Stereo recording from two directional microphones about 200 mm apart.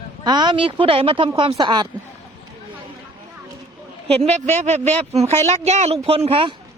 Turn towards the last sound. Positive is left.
turn(degrees=-25)  # may be behind; listen again after turning